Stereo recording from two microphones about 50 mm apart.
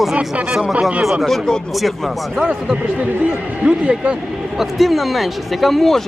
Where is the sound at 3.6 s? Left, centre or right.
Right.